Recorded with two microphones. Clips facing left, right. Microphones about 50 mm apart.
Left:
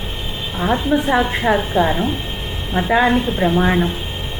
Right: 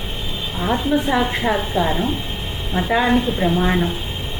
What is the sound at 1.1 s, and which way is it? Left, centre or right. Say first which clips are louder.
A woman's voice: left 3 dB; centre.